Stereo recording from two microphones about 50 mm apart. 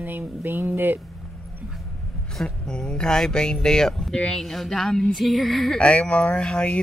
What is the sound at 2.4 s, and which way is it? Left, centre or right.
Speech, centre.